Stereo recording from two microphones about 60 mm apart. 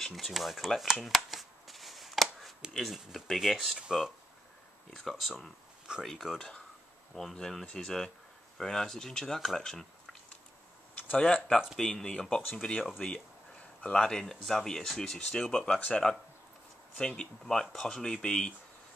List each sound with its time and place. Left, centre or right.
0.0 s shuffling cards: centre
2.7 s speech: centre
3.7 s speech: centre
4.9 s speech: centre
11.2 s speech: centre
17.5 s speech: centre